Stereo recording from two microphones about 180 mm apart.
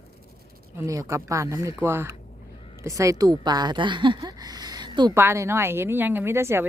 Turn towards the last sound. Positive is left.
turn(degrees=-15)  # may be behind; listen again after turning